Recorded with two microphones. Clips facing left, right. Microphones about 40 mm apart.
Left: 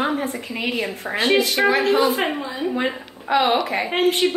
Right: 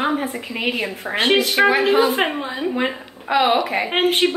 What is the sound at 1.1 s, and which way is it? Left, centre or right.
Speech, right.